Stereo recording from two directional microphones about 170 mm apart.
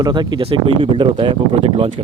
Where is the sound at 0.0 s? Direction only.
25° right (ahead or behind).